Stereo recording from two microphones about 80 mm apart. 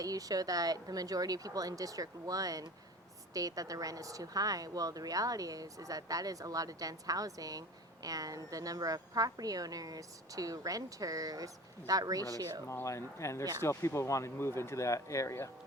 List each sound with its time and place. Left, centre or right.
0.0 s a woman's voice: right
12.6 s speech: left